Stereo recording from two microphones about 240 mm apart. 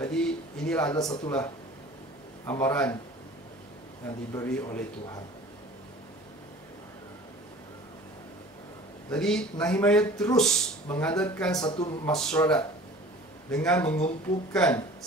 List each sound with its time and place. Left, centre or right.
0.0 s speech: centre
0.9 s a man's voice: centre
2.4 s a man's voice: centre
4.4 s a man's voice: centre
9.1 s speech: centre
11.5 s a man's voice: centre
12.1 s speech: centre